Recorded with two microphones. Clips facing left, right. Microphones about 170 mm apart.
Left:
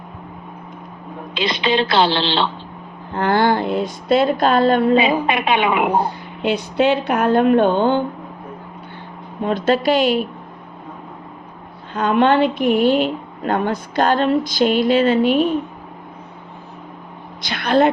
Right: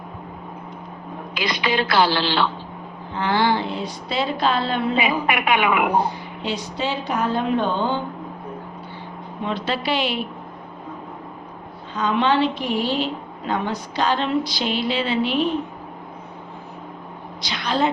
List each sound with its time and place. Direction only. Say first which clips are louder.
1.3 s a woman's voice: left 4 dB; 25° left (ahead or behind)
3.1 s a woman's voice: left 4 dB; 50° left (ahead or behind)
4.9 s a woman's voice: left 5 dB; 25° left (ahead or behind)
6.4 s speech: left 9 dB; 55° left (ahead or behind)
9.4 s a woman's voice: left 8 dB; 45° left (ahead or behind)
11.9 s a woman's voice: left 5 dB; 55° left (ahead or behind)
17.4 s a woman's voice: left 7 dB; 55° left (ahead or behind)